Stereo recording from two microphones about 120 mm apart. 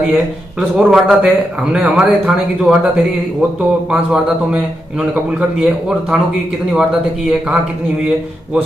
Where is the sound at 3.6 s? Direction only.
10° right (ahead or behind).